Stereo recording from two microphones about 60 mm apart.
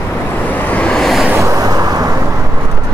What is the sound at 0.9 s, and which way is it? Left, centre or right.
Vehicle, centre.